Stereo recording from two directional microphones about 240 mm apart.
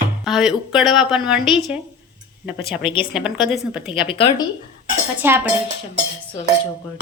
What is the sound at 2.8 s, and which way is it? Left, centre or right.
Speech, left.